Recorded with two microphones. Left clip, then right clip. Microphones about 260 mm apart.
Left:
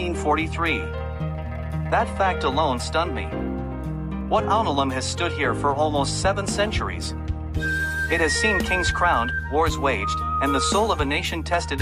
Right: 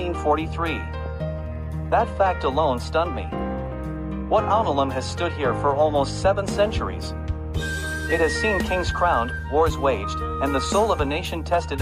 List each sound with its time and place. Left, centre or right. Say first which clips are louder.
0.0 s speech: even; left
1.9 s speech: right 1 dB; left
4.3 s speech: right 1 dB; left
8.1 s speech: right 1 dB; left